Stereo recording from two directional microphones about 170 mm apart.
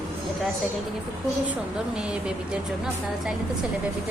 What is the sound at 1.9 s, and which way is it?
Speech, 5° right (ahead or behind).